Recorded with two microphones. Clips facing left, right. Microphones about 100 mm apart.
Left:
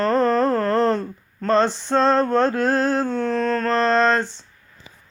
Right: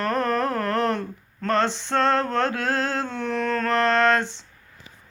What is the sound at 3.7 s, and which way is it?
Speech, 20° left (ahead or behind).